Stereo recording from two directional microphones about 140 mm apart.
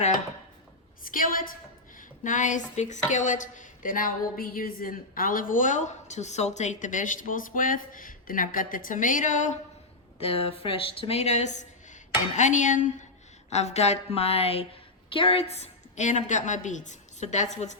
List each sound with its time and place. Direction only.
1.0 s a woman's voice: 80° left
2.0 s a woman's voice: 65° left (ahead or behind)
10.2 s a woman's voice: 45° left (ahead or behind); by 13.1 s 60° left (ahead or behind)
13.5 s a woman's voice: 50° left (ahead or behind)